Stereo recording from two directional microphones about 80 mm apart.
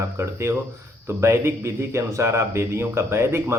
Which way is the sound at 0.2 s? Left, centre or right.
Right.